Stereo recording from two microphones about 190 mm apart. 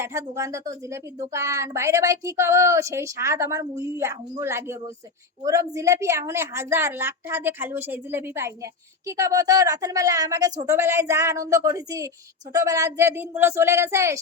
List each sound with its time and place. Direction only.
0.0 s a woman's voice: 15° right (ahead or behind)